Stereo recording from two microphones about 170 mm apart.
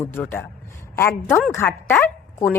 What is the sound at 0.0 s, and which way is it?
Speech, 10° left (ahead or behind).